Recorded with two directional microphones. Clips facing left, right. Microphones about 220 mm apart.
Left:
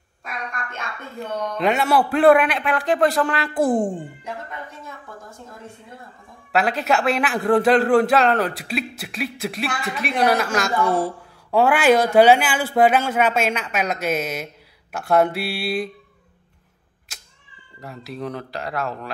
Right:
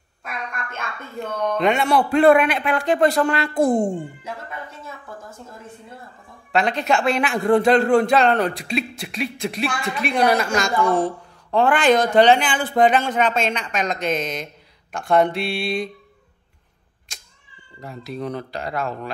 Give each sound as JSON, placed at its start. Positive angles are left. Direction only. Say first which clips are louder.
{"t": 1.6, "sound": "a man's voice", "louder": "even", "side_deg": 5}
{"t": 6.5, "sound": "a man's voice", "louder": "even", "side_deg": 5}
{"t": 17.1, "sound": "cat", "louder": "even", "side_deg": 5}
{"t": 17.8, "sound": "a man's voice", "louder": "right 2 dB", "side_deg": 0}